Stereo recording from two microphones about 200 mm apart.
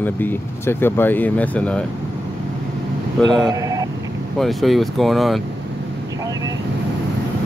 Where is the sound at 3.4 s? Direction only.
15° right (ahead or behind).